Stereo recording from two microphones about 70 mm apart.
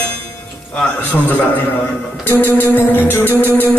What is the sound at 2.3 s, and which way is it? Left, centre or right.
Music, left.